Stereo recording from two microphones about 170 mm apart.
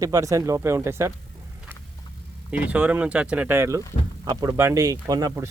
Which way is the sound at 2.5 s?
10° right (ahead or behind).